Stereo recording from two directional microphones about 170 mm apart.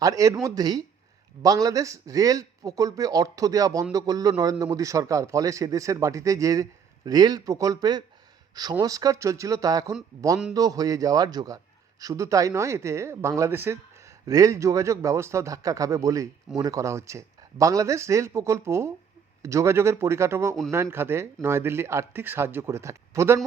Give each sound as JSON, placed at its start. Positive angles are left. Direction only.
{"t": 0.0, "sound": "a man's voice", "side_deg": -20}